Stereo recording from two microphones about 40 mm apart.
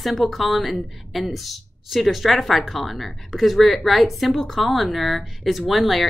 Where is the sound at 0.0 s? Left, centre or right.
Centre.